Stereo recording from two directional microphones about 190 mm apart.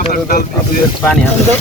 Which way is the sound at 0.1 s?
50° left (ahead or behind).